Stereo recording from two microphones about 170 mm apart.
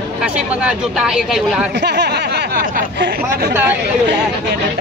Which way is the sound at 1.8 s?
80° right.